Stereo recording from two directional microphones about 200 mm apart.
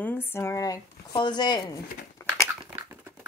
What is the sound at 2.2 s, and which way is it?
Dog, 15° left (ahead or behind).